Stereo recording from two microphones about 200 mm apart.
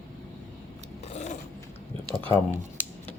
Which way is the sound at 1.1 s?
35° left (ahead or behind).